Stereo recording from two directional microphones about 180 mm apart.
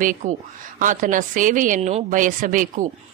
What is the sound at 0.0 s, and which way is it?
A man's voice, 45° right (ahead or behind).